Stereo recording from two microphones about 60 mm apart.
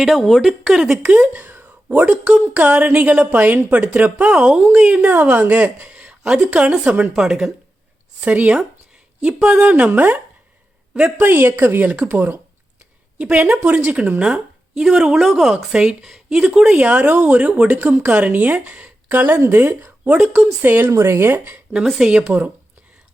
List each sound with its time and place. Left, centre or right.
0.0 s speech: centre
0.4 s a woman's voice: centre
1.4 s a woman's voice: right
7.2 s a woman's voice: centre
8.2 s a woman's voice: right
9.2 s a woman's voice: centre
11.2 s speech: right
11.9 s a woman's voice: right
16.6 s a woman's voice: right
17.7 s speech: right
18.1 s a woman's voice: right
21.3 s speech: right
21.9 s a woman's voice: centre
22.3 s a woman's voice: right